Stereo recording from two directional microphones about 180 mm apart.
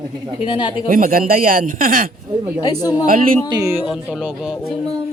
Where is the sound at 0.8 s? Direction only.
50° right (ahead or behind).